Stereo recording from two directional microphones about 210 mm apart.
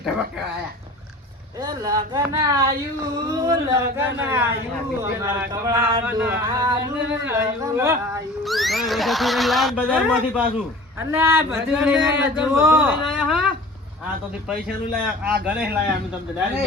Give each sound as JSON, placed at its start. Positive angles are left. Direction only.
{"t": 1.6, "sound": "speech", "side_deg": -15}
{"t": 8.4, "sound": "speech", "side_deg": 0}
{"t": 14.5, "sound": "speech", "side_deg": 0}